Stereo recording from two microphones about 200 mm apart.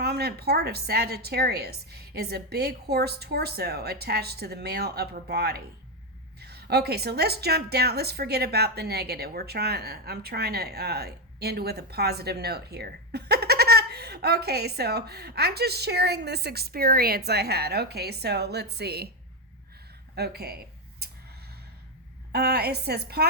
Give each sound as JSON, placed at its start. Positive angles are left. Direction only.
{"t": 0.0, "sound": "a woman's voice", "side_deg": -55}
{"t": 20.1, "sound": "a sound", "side_deg": -55}
{"t": 22.3, "sound": "a woman's voice", "side_deg": -50}